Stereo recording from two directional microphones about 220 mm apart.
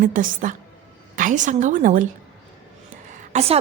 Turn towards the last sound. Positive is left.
turn(degrees=-30)  # may be behind; listen again after turning